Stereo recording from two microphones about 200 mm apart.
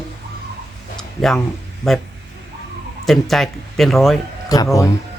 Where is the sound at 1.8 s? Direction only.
Centre (ahead or behind).